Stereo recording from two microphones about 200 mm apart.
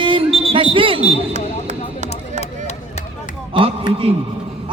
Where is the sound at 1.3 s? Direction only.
35° right (ahead or behind).